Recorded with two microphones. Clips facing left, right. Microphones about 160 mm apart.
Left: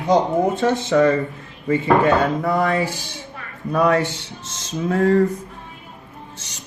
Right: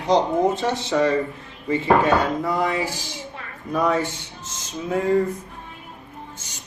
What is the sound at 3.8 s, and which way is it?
Speech, 70° left (ahead or behind).